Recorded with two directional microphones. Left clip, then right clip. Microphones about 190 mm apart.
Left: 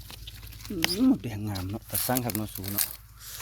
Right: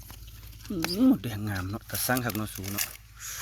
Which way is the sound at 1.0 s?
20° right (ahead or behind).